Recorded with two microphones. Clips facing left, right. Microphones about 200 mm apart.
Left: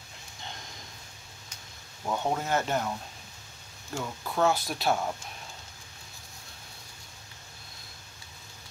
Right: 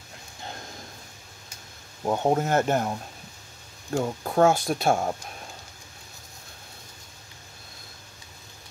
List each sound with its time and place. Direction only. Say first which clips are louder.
2.0 s speech: right 6 dB; 45° right (ahead or behind)
4.0 s speech: right 6 dB; 45° right (ahead or behind)